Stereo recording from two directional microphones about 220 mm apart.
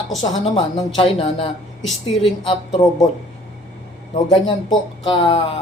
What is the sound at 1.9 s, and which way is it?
Speech, centre (ahead or behind).